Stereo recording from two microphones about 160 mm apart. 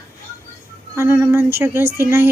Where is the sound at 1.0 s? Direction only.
15° right (ahead or behind).